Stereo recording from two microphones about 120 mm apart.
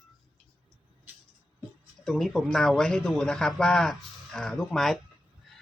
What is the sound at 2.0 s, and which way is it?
A man's voice, centre (ahead or behind).